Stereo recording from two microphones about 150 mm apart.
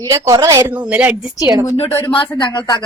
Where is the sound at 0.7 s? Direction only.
10° right (ahead or behind).